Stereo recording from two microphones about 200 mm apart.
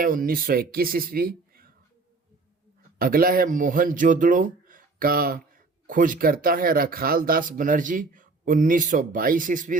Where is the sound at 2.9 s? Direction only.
45° right (ahead or behind).